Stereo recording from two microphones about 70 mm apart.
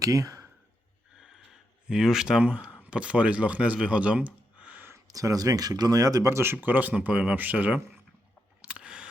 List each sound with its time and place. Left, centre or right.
0.0 s speech: right
1.9 s speech: centre
5.0 s speech: right
6.3 s speech: right
8.6 s camera: centre